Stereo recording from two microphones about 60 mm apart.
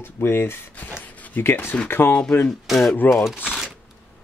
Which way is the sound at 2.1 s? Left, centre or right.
Centre.